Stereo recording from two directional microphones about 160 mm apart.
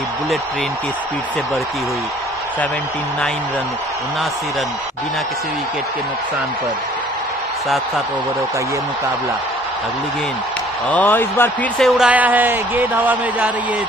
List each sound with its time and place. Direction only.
10.9 s speech: 10° left (ahead or behind)
11.8 s a man's voice: 5° right (ahead or behind)